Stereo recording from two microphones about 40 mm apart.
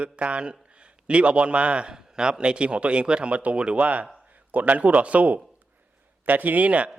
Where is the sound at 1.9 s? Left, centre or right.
Centre.